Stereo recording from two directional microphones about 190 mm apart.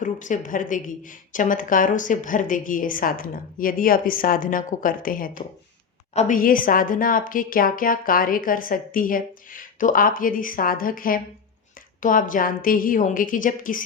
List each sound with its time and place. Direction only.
0.0 s speech: 40° left (ahead or behind)